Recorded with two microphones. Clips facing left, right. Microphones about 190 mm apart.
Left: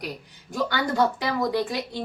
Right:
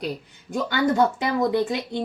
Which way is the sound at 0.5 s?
20° right (ahead or behind).